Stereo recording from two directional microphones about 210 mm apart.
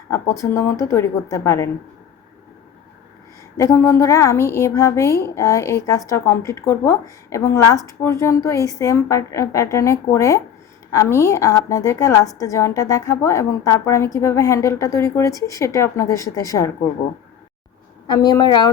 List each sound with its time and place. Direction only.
0.5 s a woman's voice: 15° left (ahead or behind)
3.6 s a woman's voice: 15° left (ahead or behind)
18.1 s a woman's voice: 20° left (ahead or behind)